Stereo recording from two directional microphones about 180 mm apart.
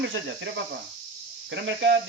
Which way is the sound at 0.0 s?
90° right.